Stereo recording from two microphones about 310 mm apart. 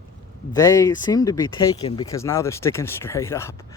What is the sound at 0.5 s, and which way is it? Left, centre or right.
Speech, centre.